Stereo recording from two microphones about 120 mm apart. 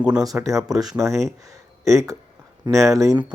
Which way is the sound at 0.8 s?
30° right (ahead or behind).